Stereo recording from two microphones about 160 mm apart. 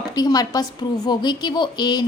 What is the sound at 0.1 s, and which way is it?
A woman's voice, 25° left (ahead or behind).